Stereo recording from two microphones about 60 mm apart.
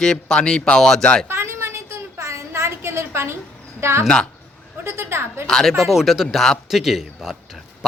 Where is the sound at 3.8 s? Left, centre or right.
Right.